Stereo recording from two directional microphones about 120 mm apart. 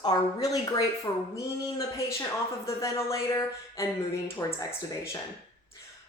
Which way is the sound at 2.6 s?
25° left (ahead or behind).